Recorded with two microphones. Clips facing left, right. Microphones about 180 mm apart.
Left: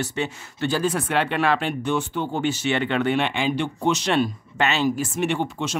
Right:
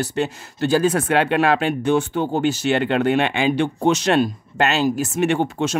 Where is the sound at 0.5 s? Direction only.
45° right (ahead or behind).